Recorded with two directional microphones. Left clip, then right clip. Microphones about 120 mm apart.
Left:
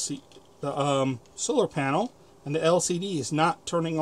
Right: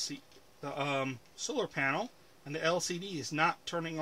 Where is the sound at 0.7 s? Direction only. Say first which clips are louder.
Left 8 dB; 30° left (ahead or behind).